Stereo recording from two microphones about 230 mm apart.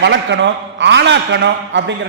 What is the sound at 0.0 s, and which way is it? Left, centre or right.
A man's voice, right.